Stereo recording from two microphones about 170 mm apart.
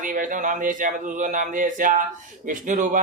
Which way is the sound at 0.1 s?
50° right (ahead or behind).